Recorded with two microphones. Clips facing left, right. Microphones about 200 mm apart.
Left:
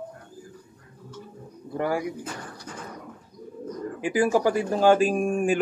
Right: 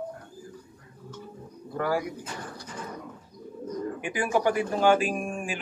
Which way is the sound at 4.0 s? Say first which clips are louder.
Left 5 dB; 35° left (ahead or behind).